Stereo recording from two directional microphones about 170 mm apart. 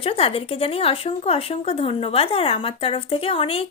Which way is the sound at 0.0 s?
35° left (ahead or behind).